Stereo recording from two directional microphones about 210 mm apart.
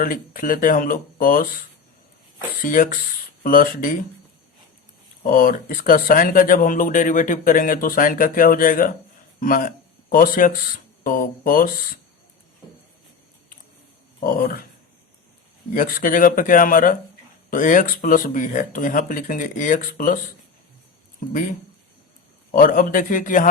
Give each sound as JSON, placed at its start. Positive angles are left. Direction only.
{"t": 0.0, "sound": "speech", "side_deg": 40}
{"t": 2.6, "sound": "speech", "side_deg": 40}
{"t": 5.2, "sound": "speech", "side_deg": 40}
{"t": 14.2, "sound": "speech", "side_deg": 40}
{"t": 15.7, "sound": "speech", "side_deg": 40}
{"t": 22.5, "sound": "speech", "side_deg": 40}